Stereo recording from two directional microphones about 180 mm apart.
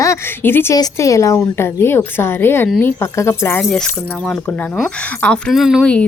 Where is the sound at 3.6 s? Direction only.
Centre (ahead or behind).